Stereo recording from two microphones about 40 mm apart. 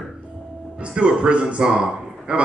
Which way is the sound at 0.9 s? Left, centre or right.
Right.